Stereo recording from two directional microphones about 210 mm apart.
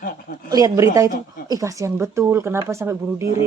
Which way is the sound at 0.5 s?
15° right (ahead or behind).